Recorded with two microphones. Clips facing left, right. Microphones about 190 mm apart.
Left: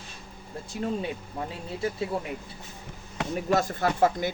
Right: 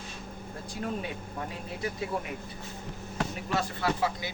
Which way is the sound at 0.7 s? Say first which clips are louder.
Left 4 dB; 20° left (ahead or behind).